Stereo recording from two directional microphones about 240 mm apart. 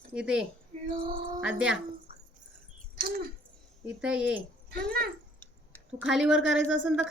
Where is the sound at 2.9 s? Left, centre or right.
Right.